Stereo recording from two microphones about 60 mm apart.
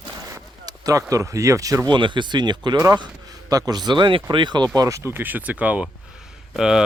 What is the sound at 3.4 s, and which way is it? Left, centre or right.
Speech, right.